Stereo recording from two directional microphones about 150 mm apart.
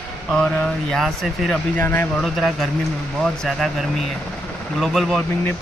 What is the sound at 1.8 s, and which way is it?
Speech, 15° left (ahead or behind).